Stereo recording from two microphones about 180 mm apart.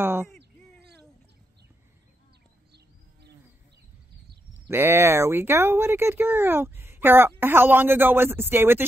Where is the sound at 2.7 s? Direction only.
65° right (ahead or behind).